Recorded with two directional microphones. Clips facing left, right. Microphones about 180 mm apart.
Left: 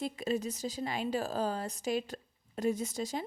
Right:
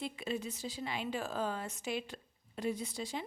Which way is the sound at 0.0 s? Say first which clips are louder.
Left 5 dB; 40° left (ahead or behind).